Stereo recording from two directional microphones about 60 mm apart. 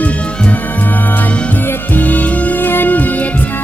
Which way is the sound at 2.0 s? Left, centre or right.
Left.